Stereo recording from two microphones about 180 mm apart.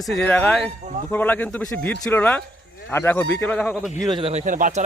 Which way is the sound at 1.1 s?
10° left (ahead or behind).